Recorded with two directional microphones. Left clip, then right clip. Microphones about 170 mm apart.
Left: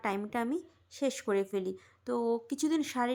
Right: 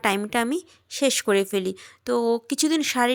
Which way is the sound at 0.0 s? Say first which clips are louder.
Right 10 dB; 25° right (ahead or behind).